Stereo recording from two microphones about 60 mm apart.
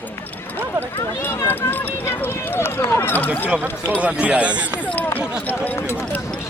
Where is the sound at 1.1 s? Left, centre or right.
Left.